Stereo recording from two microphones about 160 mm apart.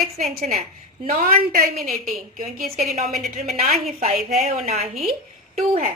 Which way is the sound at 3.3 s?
45° right (ahead or behind).